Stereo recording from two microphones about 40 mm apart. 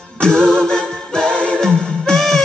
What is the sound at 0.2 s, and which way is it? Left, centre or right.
A capella, centre.